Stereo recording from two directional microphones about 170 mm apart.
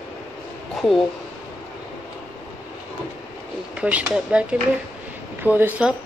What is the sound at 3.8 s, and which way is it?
Speech, 10° right (ahead or behind).